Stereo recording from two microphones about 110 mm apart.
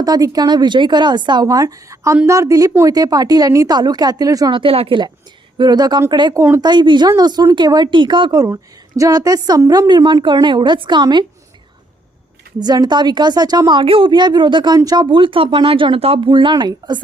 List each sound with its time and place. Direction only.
0.0 s speech: 35° right (ahead or behind)
4.5 s speech: 55° right (ahead or behind)
5.5 s speech: 40° right (ahead or behind)
9.0 s speech: 30° right (ahead or behind)
12.5 s speech: 40° right (ahead or behind); by 16.3 s 60° right (ahead or behind)
16.3 s speech: 45° right (ahead or behind)